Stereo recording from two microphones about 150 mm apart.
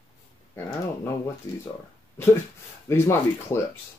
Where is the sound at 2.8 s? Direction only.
15° left (ahead or behind).